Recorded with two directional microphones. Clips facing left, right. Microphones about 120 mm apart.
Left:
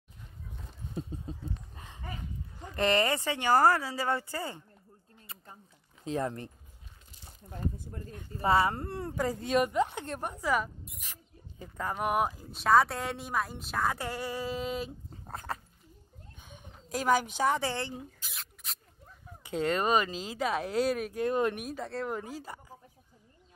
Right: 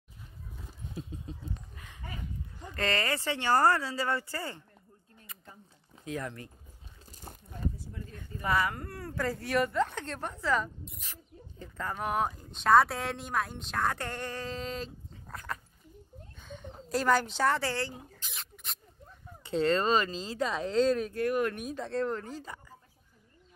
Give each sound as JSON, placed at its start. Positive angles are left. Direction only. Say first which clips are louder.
{"t": 2.7, "sound": "a woman's voice", "louder": "left 4 dB", "side_deg": 20}
{"t": 5.2, "sound": "a sound", "louder": "left 1 dB", "side_deg": 30}
{"t": 6.0, "sound": "speech", "louder": "left 5 dB", "side_deg": 30}
{"t": 7.1, "sound": "biting", "louder": "right 9 dB", "side_deg": -45}
{"t": 7.7, "sound": "a sound", "louder": "left 2 dB", "side_deg": 50}
{"t": 8.3, "sound": "a woman's voice", "louder": "left 4 dB", "side_deg": 30}
{"t": 15.3, "sound": "speech", "louder": "left 2 dB", "side_deg": 30}
{"t": 16.3, "sound": "a sound", "louder": "right 7 dB", "side_deg": 10}
{"t": 16.9, "sound": "a woman's voice", "louder": "even", "side_deg": 10}
{"t": 18.2, "sound": "rodents", "louder": "right 1 dB", "side_deg": 0}
{"t": 19.4, "sound": "a woman's voice", "louder": "right 2 dB", "side_deg": 15}
{"t": 21.2, "sound": "speech", "louder": "even", "side_deg": 20}
{"t": 21.5, "sound": "a woman's voice", "louder": "right 3 dB", "side_deg": 0}